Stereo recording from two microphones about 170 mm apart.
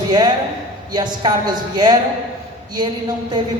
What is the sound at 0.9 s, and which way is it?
A woman's voice, 25° right (ahead or behind).